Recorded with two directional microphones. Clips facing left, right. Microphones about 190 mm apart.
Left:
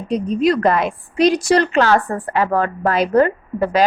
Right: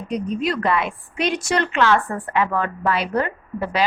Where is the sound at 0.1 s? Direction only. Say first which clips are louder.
Left 7 dB; 35° left (ahead or behind).